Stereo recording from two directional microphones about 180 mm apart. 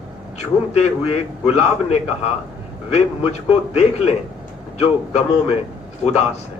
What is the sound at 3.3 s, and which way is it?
A man's voice, 35° left (ahead or behind).